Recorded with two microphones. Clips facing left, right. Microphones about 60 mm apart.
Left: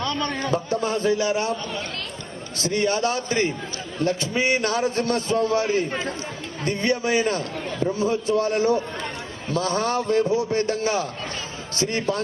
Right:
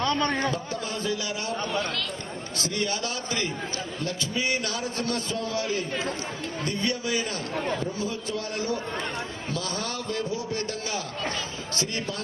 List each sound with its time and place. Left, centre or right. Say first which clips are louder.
0.0 s a man's voice: right 1 dB; right
0.5 s a man's voice: left 8 dB; left
2.6 s a man's voice: left 8 dB; left